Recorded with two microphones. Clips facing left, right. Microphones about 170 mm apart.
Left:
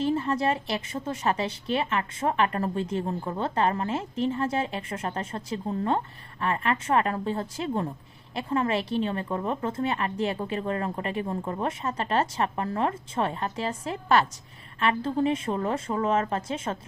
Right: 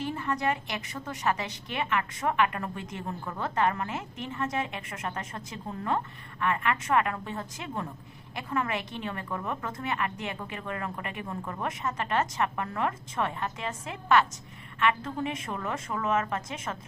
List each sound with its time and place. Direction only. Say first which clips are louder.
0.0 s a woman's voice: left 5 dB; 30° left (ahead or behind)